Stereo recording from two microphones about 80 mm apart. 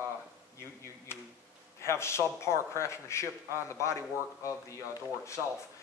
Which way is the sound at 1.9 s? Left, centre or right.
Left.